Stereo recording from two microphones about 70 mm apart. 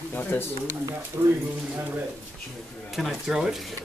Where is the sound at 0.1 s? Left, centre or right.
Left.